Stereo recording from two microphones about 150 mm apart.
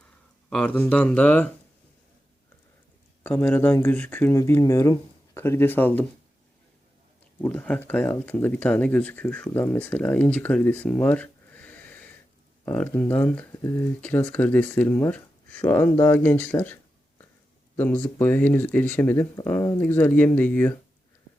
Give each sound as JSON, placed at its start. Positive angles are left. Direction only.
{"t": 0.5, "sound": "speech", "side_deg": 10}
{"t": 3.2, "sound": "speech", "side_deg": 10}
{"t": 7.4, "sound": "speech", "side_deg": 10}
{"t": 17.7, "sound": "speech", "side_deg": 10}